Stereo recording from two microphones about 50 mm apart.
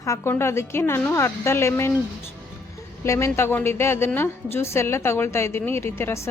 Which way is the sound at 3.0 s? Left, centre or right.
Left.